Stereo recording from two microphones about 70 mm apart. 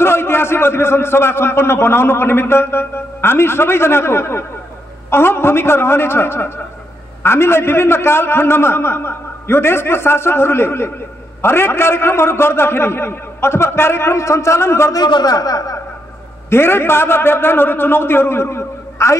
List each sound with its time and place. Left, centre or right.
0.0 s a man's voice: left
14.9 s a man's voice: left
16.4 s a man's voice: left